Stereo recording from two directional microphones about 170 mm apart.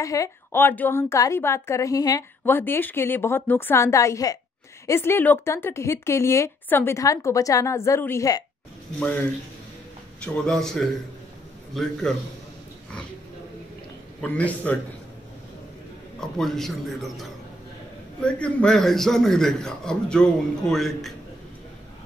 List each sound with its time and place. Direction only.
0.0 s a woman's voice: 20° left (ahead or behind)
10.2 s a man's voice: 5° left (ahead or behind)
14.2 s a woman's voice: 10° left (ahead or behind)
16.2 s a man's voice: centre (ahead or behind)